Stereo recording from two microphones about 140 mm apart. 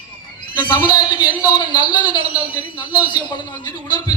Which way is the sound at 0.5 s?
30° left (ahead or behind).